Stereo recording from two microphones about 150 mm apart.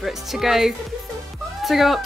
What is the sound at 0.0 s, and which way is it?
Speech, centre (ahead or behind).